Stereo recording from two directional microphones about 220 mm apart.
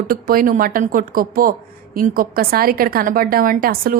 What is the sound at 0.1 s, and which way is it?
A woman's voice, 40° right (ahead or behind).